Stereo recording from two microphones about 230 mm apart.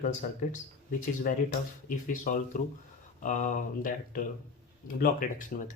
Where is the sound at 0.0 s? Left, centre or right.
Left.